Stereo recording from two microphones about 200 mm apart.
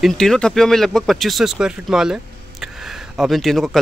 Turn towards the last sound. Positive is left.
turn(degrees=0)  # may be behind; listen again after turning